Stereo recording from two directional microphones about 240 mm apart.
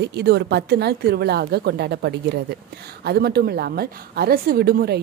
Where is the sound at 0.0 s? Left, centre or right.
Right.